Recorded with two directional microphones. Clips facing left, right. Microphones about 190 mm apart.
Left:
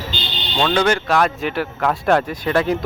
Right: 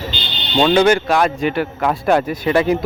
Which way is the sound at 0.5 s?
15° right (ahead or behind).